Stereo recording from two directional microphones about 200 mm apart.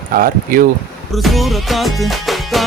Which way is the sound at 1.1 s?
Centre (ahead or behind).